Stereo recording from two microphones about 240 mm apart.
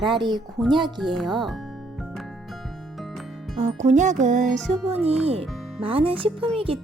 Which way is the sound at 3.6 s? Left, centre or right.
Right.